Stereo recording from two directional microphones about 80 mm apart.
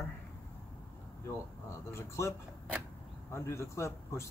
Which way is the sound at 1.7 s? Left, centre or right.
Left.